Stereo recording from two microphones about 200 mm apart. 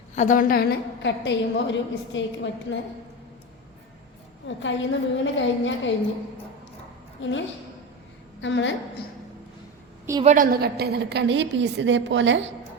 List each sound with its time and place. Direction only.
0.2 s a woman's voice: 40° left (ahead or behind); by 2.7 s 65° left (ahead or behind)
4.4 s a woman's voice: 65° left (ahead or behind)
7.2 s a woman's voice: 70° left (ahead or behind)
10.2 s a woman's voice: 45° right (ahead or behind); by 12.4 s 65° right (ahead or behind)